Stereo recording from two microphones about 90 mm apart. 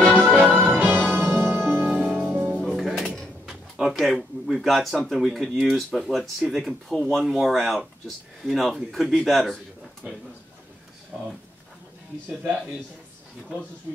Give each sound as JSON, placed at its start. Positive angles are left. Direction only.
{"t": 0.1, "sound": "music", "side_deg": 10}
{"t": 0.4, "sound": "music", "side_deg": -25}
{"t": 1.9, "sound": "music", "side_deg": -15}
{"t": 2.6, "sound": "music", "side_deg": 0}
{"t": 3.9, "sound": "speech", "side_deg": 0}
{"t": 11.1, "sound": "speech", "side_deg": -10}